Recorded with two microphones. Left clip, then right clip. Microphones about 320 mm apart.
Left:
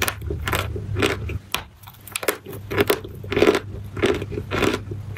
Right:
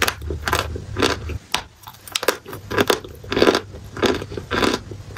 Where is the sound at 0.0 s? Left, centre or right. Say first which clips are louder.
Right 4 dB; centre.